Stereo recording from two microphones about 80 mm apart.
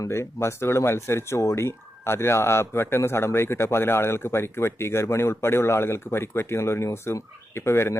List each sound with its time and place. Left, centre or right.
0.0 s speech: left